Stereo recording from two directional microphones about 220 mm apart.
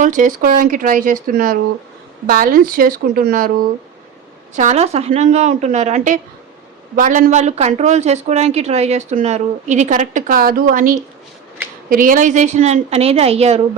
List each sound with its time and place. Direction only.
0.0 s speech: 35° right (ahead or behind)
4.5 s speech: 30° right (ahead or behind)